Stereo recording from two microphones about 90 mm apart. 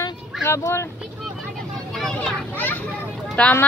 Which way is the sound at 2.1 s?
15° left (ahead or behind).